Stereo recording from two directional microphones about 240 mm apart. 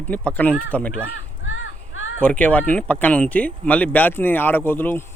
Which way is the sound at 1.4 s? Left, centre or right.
Left.